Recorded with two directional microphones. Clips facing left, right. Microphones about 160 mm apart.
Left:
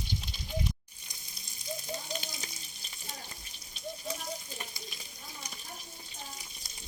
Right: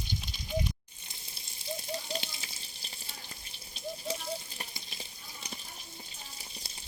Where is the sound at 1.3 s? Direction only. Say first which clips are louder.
Right 1 dB; 30° right (ahead or behind).